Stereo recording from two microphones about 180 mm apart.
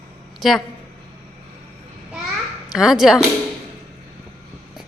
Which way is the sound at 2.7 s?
5° right (ahead or behind).